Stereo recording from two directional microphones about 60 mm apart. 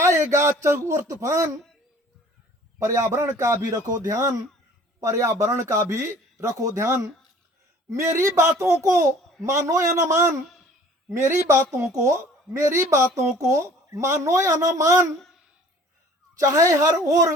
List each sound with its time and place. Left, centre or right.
0.0 s a sound: right
0.6 s a man's voice: right
2.7 s a man's voice: right
16.4 s a man's voice: right